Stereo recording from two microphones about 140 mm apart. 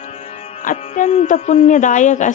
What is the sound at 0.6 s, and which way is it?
Music, 60° left (ahead or behind).